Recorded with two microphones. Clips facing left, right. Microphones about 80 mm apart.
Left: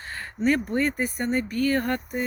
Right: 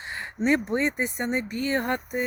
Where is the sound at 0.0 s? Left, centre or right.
Centre.